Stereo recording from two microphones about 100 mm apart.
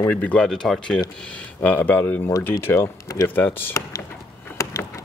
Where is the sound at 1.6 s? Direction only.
15° left (ahead or behind); by 3.3 s 30° left (ahead or behind).